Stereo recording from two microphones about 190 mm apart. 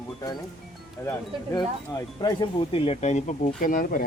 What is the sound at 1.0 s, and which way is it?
Speech, 15° left (ahead or behind).